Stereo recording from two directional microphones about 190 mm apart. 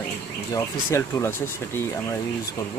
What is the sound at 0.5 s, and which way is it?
Speech, 15° left (ahead or behind).